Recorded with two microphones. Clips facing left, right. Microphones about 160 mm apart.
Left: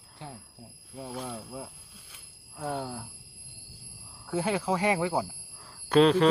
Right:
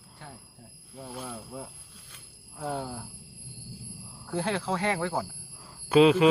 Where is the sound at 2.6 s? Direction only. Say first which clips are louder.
Even; 5° right (ahead or behind).